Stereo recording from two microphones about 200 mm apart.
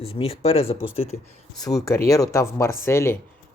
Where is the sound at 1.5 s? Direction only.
15° left (ahead or behind).